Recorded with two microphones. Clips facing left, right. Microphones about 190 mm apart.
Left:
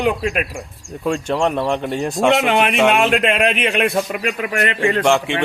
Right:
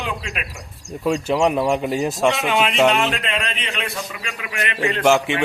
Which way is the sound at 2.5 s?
55° left (ahead or behind).